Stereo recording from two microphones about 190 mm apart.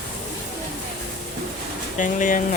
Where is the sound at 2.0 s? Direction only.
45° left (ahead or behind).